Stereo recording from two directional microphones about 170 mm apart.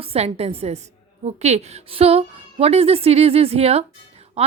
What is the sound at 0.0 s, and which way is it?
A woman's voice, 35° right (ahead or behind).